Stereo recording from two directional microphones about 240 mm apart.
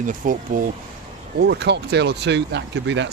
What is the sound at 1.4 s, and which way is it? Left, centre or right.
Speech, right.